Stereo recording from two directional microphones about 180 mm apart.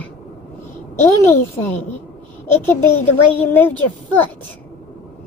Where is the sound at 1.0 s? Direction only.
15° left (ahead or behind).